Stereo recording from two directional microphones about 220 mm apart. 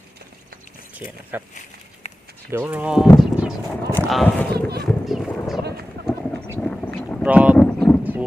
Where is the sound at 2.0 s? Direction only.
30° left (ahead or behind).